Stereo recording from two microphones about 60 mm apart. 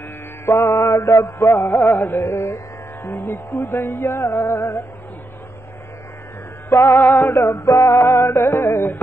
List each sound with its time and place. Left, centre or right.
0.5 s music: left
6.7 s music: left